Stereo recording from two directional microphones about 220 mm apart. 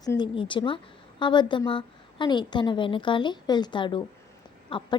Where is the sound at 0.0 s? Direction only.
20° left (ahead or behind).